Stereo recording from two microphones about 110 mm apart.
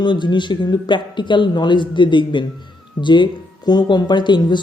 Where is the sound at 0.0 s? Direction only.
45° left (ahead or behind).